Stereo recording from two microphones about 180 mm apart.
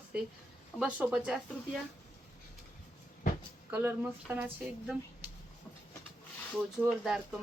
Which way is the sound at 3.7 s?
10° right (ahead or behind).